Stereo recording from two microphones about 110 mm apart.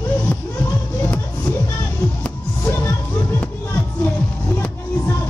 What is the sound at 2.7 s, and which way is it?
Music, 20° left (ahead or behind).